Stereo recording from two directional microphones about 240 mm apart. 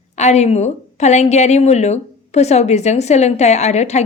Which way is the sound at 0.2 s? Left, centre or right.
Left.